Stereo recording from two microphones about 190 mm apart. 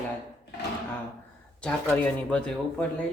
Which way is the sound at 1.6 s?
5° left (ahead or behind).